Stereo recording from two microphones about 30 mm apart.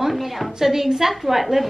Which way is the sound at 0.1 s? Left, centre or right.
Centre.